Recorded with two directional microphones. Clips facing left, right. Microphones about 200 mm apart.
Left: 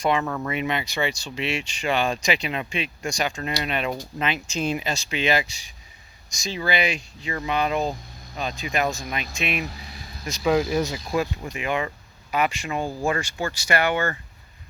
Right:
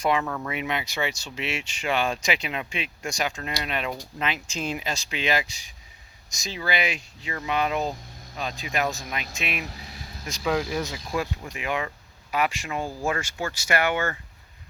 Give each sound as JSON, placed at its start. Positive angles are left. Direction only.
{"t": 0.0, "sound": "speech", "side_deg": -5}
{"t": 10.4, "sound": "speech", "side_deg": 15}
{"t": 11.5, "sound": "speech", "side_deg": 0}